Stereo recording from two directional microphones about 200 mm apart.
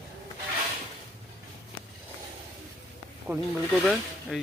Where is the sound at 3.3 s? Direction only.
15° right (ahead or behind).